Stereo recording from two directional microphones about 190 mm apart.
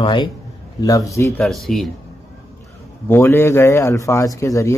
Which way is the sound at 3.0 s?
10° left (ahead or behind).